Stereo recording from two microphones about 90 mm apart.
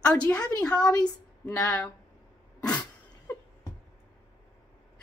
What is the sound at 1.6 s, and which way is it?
Speech, 30° left (ahead or behind).